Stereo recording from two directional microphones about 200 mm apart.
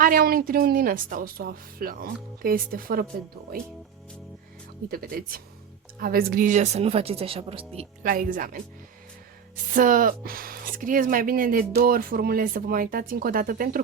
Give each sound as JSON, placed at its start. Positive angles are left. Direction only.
{"t": 0.0, "sound": "speech", "side_deg": -45}
{"t": 4.9, "sound": "speech", "side_deg": -45}
{"t": 8.0, "sound": "speech", "side_deg": -45}
{"t": 9.7, "sound": "speech", "side_deg": -40}